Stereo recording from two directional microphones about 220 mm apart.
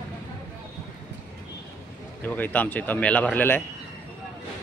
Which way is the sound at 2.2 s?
10° left (ahead or behind).